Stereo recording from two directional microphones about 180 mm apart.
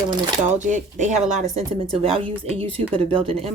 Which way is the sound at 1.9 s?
30° right (ahead or behind).